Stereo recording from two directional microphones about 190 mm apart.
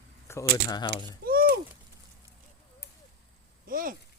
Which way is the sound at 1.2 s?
50° right (ahead or behind).